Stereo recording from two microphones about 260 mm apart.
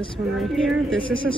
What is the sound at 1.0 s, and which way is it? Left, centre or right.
Speech, centre.